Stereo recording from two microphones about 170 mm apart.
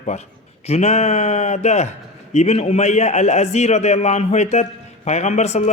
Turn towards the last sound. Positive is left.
turn(degrees=40)  # may be behind; listen again after turning